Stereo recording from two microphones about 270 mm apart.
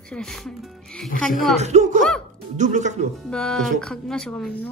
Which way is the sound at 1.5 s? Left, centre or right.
Right.